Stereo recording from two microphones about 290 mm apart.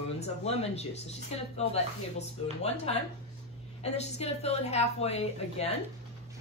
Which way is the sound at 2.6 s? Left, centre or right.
Left.